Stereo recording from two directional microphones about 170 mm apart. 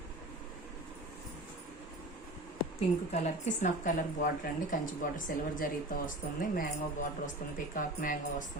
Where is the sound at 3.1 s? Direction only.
45° left (ahead or behind).